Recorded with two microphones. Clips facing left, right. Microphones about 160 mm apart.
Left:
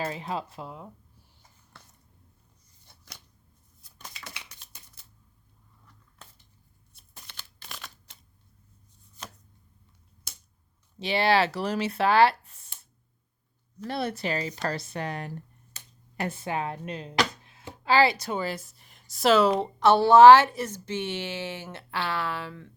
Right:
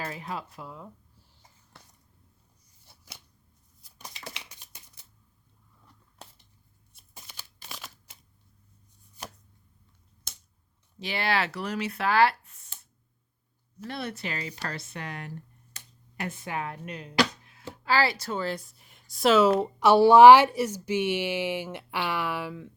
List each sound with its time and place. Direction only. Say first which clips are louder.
0.0 s speech: left 4 dB; 25° left (ahead or behind)
2.8 s a sound: even; 5° right (ahead or behind)
4.6 s shuffling cards: even; 15° right (ahead or behind)
6.9 s a sound: right 1 dB; 10° right (ahead or behind)
11.0 s speech: left 5 dB; 25° left (ahead or behind)
13.8 s speech: left 5 dB; 35° left (ahead or behind); by 22.7 s 10° right (ahead or behind)